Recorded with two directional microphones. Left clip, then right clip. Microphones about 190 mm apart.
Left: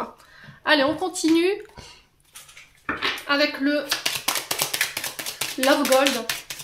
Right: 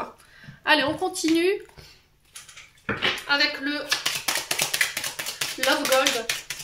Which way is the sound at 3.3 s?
55° left (ahead or behind).